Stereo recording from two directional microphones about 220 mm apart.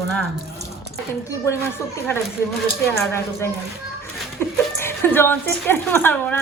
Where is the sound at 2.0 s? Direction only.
10° left (ahead or behind).